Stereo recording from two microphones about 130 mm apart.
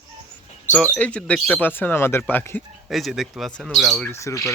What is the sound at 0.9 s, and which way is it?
Speech, 10° left (ahead or behind).